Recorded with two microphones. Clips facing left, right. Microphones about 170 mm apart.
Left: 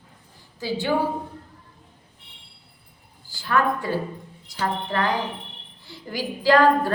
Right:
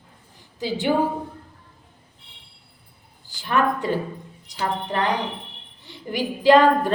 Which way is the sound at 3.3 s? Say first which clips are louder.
Right 1 dB; 20° right (ahead or behind).